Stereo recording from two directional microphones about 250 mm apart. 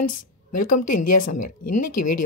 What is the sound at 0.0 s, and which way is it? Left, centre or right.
A woman's voice, left.